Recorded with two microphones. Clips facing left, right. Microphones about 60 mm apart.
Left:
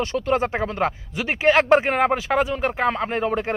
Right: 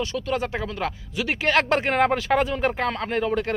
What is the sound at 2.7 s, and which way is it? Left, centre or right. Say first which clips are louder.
Speech: left 3 dB; centre.